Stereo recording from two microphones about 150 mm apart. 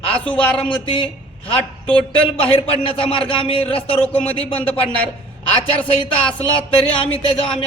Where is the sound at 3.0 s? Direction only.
35° left (ahead or behind).